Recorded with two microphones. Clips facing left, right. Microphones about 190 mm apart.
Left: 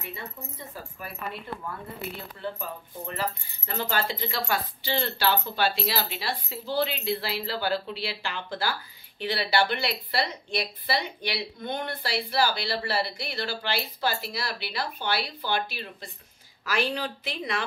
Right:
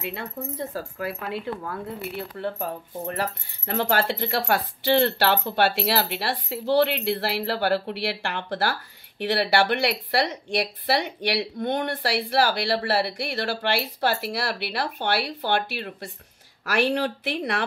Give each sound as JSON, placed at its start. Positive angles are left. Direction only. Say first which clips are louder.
{"t": 0.0, "sound": "speech", "louder": "right 7 dB", "side_deg": -80}
{"t": 3.2, "sound": "speech", "louder": "right 3 dB", "side_deg": -70}